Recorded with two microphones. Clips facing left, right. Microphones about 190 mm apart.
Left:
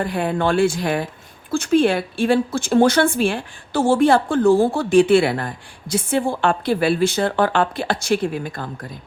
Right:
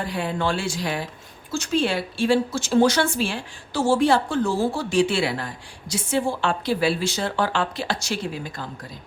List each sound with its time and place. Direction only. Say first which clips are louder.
0.0 s speech: left 5 dB; 55° left (ahead or behind)